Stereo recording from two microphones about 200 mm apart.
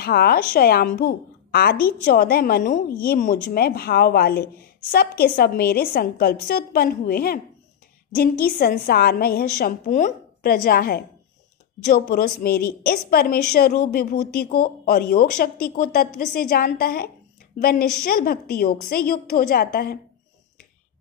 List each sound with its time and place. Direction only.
0.0 s a woman's voice: 50° left (ahead or behind)
13.7 s speech: 35° left (ahead or behind)
14.3 s a woman's voice: 50° left (ahead or behind)